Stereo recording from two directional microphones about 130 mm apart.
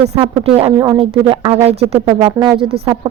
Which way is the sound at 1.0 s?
40° right (ahead or behind).